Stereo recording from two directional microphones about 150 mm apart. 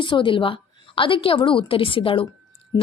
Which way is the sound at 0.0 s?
35° left (ahead or behind).